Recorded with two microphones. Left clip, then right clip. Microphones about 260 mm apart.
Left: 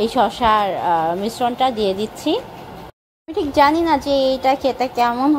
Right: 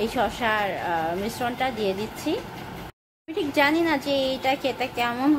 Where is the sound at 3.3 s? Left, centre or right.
Centre.